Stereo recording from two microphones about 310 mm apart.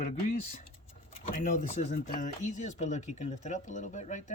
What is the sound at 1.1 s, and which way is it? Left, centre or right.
Speech, left.